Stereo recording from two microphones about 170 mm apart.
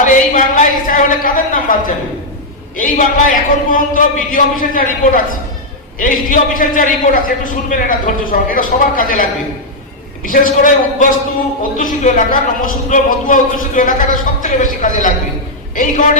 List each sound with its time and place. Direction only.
0.0 s a woman's voice: 50° left (ahead or behind)
2.7 s a man's voice: 50° left (ahead or behind)
10.2 s a man's voice: 55° left (ahead or behind)